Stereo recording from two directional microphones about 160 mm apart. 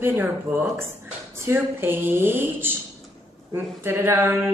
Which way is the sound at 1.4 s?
15° right (ahead or behind).